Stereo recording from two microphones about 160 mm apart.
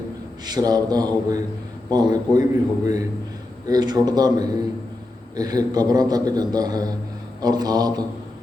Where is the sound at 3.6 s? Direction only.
25° right (ahead or behind).